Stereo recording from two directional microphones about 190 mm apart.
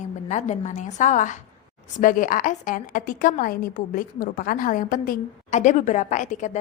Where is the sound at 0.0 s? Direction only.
40° left (ahead or behind).